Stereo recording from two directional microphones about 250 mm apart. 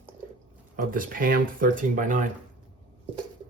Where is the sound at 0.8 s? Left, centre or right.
Right.